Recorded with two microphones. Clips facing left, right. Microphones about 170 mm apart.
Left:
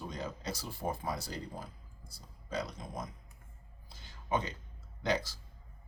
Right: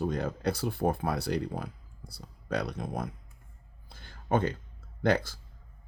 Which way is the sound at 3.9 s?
55° right (ahead or behind).